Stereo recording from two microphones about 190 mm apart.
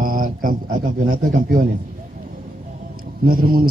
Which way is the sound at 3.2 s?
50° right (ahead or behind).